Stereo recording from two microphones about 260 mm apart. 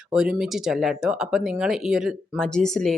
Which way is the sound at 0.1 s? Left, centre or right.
Centre.